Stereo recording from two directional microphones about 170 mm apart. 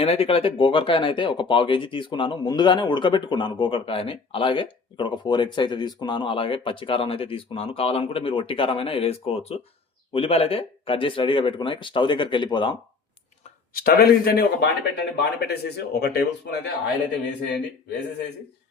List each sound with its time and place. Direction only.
0.0 s speech: 35° left (ahead or behind)
13.7 s speech: 65° left (ahead or behind)